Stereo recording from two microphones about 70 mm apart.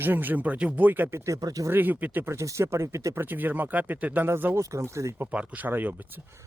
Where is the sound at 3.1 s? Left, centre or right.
Right.